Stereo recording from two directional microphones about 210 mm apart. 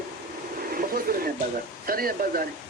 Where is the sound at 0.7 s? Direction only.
45° right (ahead or behind).